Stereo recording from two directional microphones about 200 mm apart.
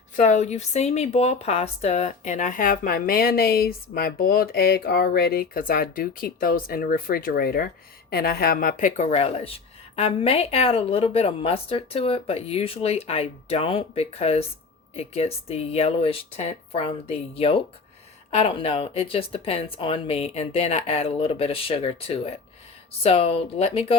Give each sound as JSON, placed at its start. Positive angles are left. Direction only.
{"t": 0.2, "sound": "speech", "side_deg": 35}